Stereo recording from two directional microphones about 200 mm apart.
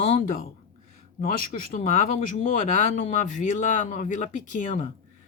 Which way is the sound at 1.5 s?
40° left (ahead or behind).